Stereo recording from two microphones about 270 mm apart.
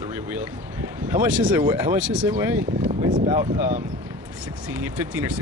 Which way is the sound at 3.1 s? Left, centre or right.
Centre.